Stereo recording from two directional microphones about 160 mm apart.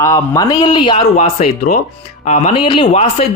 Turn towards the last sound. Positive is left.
turn(degrees=35)  # may be behind; listen again after turning